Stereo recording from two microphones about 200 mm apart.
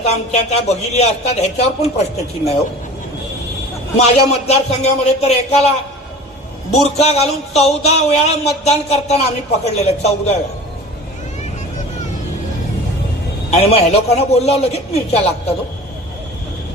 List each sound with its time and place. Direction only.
0.0 s a man's voice: 35° left (ahead or behind)
3.9 s a man's voice: 30° left (ahead or behind)
13.5 s a man's voice: 30° left (ahead or behind)